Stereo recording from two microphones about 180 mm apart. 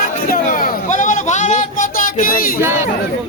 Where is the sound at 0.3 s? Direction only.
50° left (ahead or behind).